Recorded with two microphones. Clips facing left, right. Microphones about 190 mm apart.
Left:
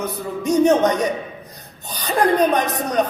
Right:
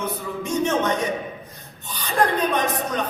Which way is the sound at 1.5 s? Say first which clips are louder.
Left 2 dB; 40° left (ahead or behind).